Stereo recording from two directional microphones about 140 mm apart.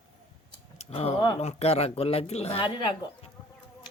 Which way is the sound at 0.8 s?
45° left (ahead or behind).